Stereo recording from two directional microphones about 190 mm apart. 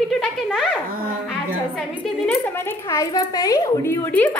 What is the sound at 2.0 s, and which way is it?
Speech, 10° left (ahead or behind).